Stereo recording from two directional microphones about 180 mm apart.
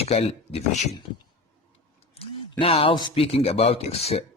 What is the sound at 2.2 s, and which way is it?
Speech, 30° left (ahead or behind).